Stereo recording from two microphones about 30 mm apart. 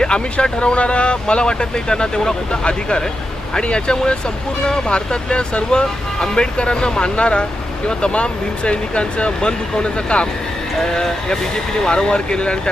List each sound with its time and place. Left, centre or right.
0.0 s speech: left
5.8 s speech: centre
6.3 s speech: left
9.4 s speech: left
10.9 s speech: left